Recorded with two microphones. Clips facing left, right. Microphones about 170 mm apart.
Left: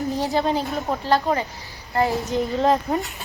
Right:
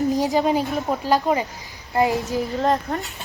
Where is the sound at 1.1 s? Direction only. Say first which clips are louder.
Even; 10° right (ahead or behind).